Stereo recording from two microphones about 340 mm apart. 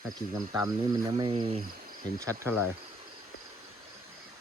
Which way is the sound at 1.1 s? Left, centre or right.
Centre.